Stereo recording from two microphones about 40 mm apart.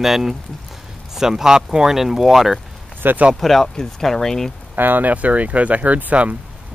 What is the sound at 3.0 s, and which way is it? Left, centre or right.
Speech, right.